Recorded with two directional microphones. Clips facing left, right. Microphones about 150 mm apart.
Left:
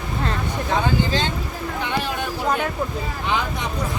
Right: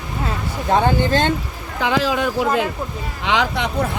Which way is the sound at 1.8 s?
90° right.